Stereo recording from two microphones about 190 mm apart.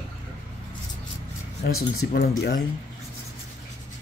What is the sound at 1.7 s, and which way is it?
Speech, 90° left.